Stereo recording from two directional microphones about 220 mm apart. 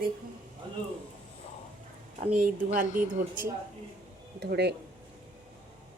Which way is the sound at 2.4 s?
35° right (ahead or behind).